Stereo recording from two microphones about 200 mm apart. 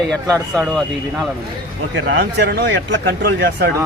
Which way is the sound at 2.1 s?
60° right (ahead or behind).